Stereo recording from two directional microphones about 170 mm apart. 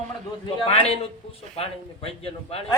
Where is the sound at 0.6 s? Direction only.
30° left (ahead or behind).